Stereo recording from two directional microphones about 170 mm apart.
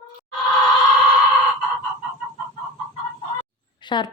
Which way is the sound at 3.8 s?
25° left (ahead or behind).